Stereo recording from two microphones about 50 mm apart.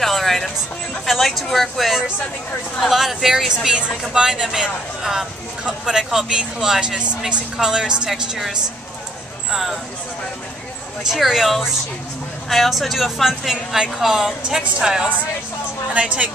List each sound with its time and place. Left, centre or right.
0.0 s music: centre
1.0 s speech: centre
9.5 s speech: centre
11.1 s speech: centre
15.9 s a woman's voice: right